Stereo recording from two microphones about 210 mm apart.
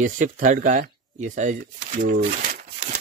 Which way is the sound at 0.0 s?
40° right (ahead or behind).